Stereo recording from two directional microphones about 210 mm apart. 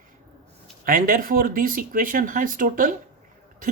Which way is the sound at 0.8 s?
40° right (ahead or behind).